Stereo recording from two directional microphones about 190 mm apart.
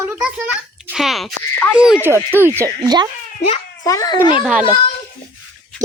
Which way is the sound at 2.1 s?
10° right (ahead or behind).